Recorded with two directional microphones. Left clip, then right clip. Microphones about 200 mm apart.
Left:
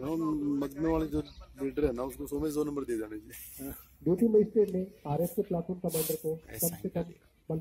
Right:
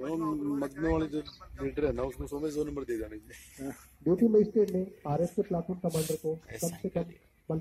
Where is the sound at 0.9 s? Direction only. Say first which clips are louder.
Even; 50° left (ahead or behind).